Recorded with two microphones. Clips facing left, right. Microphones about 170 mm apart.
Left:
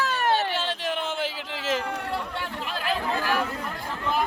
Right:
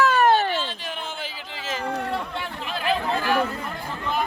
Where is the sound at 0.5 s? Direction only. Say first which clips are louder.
Left 1 dB; 75° left (ahead or behind).